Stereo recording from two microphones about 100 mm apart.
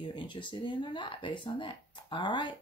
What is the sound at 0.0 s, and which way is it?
Speech, 50° left (ahead or behind).